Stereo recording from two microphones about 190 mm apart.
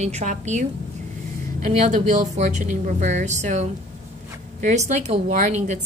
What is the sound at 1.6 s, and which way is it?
A woman's voice, 40° right (ahead or behind).